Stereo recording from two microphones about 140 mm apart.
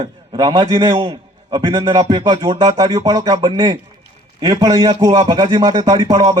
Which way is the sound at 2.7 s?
25° right (ahead or behind).